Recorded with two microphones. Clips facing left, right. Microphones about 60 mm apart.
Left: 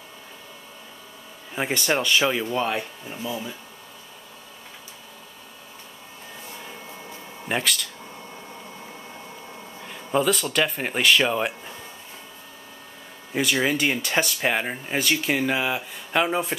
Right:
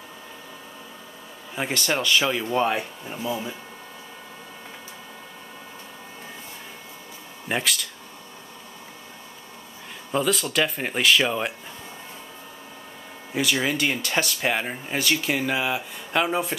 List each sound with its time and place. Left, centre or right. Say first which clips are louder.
1.5 s speech: left 2 dB; centre
2.4 s speech: right 2 dB; centre
7.4 s speech: even; centre
10.1 s speech: left 1 dB; centre
13.3 s speech: left 1 dB; centre